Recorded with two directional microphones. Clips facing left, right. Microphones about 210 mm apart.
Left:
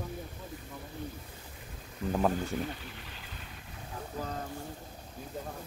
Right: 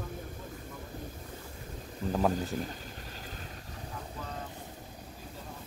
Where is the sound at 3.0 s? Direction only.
40° right (ahead or behind).